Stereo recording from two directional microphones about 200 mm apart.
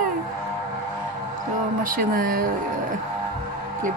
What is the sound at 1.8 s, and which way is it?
Speech, 45° right (ahead or behind).